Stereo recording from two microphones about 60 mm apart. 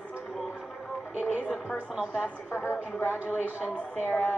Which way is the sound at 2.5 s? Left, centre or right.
Left.